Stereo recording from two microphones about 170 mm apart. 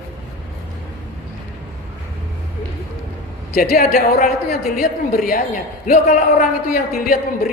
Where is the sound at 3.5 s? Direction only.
60° left (ahead or behind).